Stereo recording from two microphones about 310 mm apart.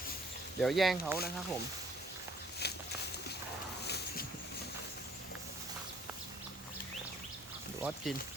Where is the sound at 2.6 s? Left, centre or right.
Left.